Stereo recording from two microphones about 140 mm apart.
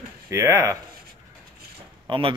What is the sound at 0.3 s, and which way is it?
Speech, 20° right (ahead or behind).